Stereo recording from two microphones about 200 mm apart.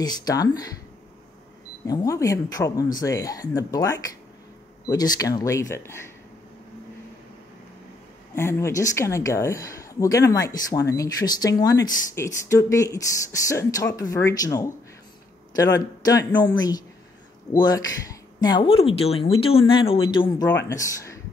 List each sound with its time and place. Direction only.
0.0 s speech: 20° left (ahead or behind)
1.9 s speech: 15° left (ahead or behind)
8.4 s speech: 15° left (ahead or behind)
20.4 s speech: 15° left (ahead or behind)